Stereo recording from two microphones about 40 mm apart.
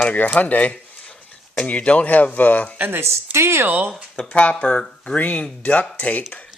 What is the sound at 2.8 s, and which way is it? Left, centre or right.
Speech, right.